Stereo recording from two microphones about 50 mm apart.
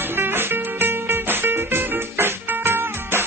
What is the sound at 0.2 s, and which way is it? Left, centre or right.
Music, right.